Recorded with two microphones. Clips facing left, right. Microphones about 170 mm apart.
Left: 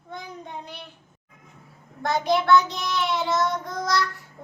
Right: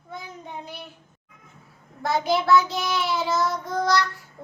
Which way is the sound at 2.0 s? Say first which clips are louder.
Even; 5° right (ahead or behind).